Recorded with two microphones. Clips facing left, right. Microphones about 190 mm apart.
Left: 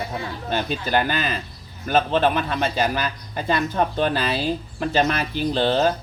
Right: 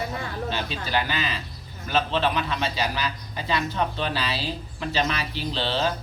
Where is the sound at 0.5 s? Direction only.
50° left (ahead or behind).